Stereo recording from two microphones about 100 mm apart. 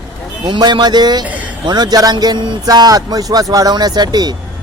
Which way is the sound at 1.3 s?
15° right (ahead or behind).